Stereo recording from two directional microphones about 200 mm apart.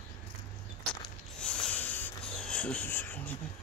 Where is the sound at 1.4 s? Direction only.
5° left (ahead or behind).